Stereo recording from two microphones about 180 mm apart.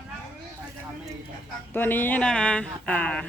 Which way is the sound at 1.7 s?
10° left (ahead or behind).